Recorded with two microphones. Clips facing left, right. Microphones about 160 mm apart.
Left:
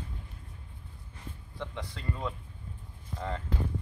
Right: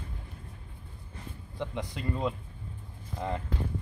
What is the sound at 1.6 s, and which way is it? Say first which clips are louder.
Speech: right 5 dB; 15° right (ahead or behind).